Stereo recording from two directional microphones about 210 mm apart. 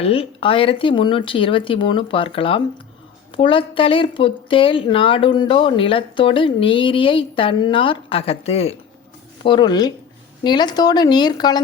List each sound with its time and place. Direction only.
0.0 s a woman's voice: 25° left (ahead or behind)